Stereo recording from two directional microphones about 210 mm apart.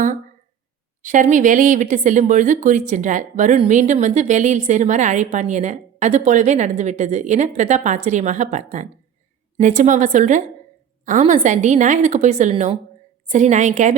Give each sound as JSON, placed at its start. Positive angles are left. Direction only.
{"t": 1.0, "sound": "speech", "side_deg": -40}